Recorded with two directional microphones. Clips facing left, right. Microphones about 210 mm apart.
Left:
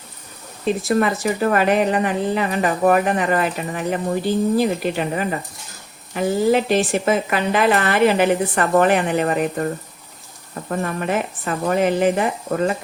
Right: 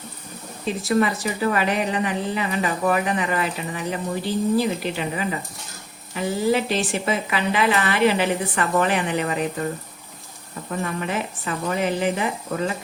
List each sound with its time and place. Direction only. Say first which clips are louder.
0.9 s a woman's voice: left 1 dB; 50° left (ahead or behind)
10.7 s a woman's voice: left 4 dB; 50° left (ahead or behind)